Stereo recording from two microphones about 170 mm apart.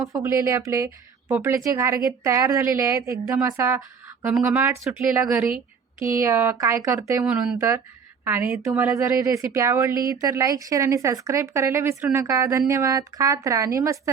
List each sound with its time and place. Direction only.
0.1 s a woman's voice: 15° right (ahead or behind)